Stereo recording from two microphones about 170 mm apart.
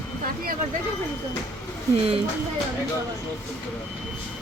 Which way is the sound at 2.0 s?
35° right (ahead or behind).